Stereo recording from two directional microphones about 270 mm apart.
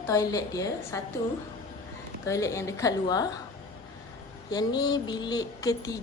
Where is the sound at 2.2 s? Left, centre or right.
Centre.